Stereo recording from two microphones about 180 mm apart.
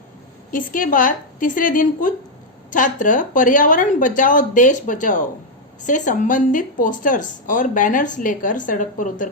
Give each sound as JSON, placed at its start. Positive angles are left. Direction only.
{"t": 0.5, "sound": "speech", "side_deg": 50}